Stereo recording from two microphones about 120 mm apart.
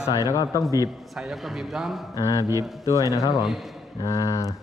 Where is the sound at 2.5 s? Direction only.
25° right (ahead or behind).